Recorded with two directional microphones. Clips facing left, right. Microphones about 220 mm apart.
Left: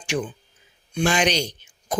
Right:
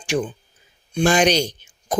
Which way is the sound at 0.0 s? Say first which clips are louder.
Right 4 dB; 40° right (ahead or behind).